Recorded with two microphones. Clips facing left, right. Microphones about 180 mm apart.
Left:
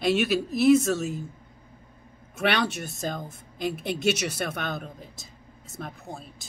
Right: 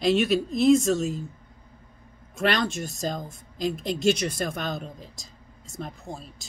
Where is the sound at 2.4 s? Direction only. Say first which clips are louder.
Right 1 dB; 70° left (ahead or behind).